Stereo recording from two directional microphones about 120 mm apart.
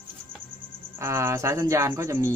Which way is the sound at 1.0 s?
25° right (ahead or behind).